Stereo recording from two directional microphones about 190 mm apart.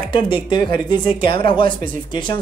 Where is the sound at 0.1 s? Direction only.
25° left (ahead or behind).